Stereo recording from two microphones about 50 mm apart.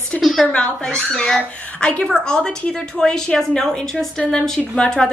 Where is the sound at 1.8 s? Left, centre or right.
Left.